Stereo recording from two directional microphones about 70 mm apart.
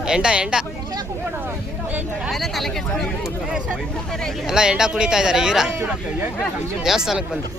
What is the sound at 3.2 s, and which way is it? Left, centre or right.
Speech, centre.